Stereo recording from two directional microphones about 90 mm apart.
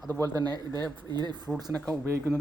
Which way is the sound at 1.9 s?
30° right (ahead or behind).